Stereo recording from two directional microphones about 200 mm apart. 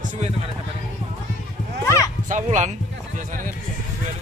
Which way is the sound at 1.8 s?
15° left (ahead or behind).